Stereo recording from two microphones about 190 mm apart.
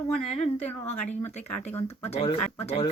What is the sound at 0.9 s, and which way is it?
A woman's voice, 35° left (ahead or behind).